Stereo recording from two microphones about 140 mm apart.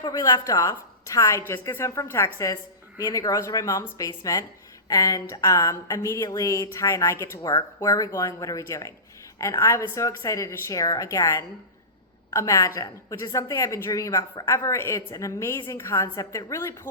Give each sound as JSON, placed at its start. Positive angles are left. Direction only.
{"t": 0.0, "sound": "speech", "side_deg": 30}